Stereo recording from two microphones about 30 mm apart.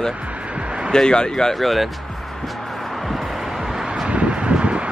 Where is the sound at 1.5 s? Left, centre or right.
Centre.